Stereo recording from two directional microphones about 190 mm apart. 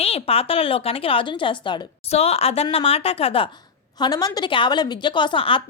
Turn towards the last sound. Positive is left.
turn(degrees=25)  # may be behind; listen again after turning